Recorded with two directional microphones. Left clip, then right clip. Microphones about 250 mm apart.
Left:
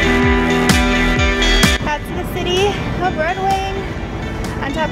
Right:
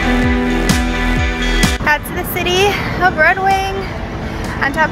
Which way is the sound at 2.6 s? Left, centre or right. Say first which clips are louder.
Right 6 dB; centre.